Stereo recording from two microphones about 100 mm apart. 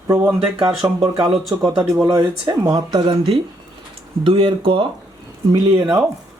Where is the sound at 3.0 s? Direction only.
75° right (ahead or behind).